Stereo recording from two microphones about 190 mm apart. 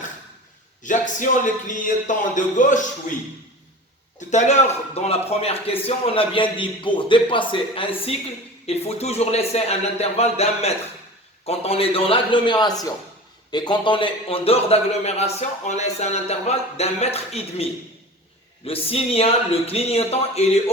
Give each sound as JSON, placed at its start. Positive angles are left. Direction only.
{"t": 0.8, "sound": "a man's voice", "side_deg": 40}
{"t": 4.3, "sound": "a man's voice", "side_deg": 35}